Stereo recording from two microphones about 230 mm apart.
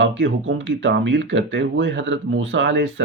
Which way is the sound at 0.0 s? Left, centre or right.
Right.